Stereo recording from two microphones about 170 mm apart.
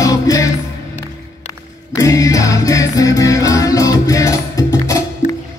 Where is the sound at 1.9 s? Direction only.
20° left (ahead or behind).